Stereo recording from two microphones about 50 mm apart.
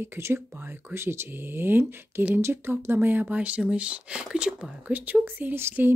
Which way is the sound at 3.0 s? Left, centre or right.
Right.